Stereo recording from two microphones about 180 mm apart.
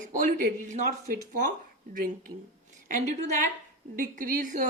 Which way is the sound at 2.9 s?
40° right (ahead or behind).